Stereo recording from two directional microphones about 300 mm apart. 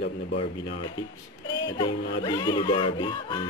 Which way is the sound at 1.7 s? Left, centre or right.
Centre.